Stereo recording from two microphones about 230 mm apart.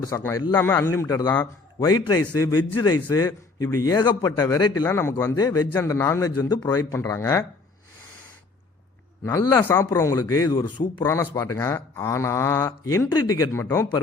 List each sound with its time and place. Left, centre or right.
0.0 s a man's voice: centre
9.2 s a man's voice: centre